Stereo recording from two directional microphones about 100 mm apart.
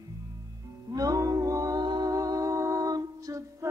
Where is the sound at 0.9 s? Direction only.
35° right (ahead or behind).